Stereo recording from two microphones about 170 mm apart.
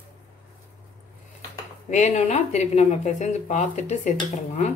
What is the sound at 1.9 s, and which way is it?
Speech, 45° left (ahead or behind).